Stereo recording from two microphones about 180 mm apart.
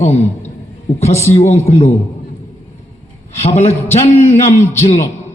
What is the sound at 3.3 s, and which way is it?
A man's voice, 35° left (ahead or behind).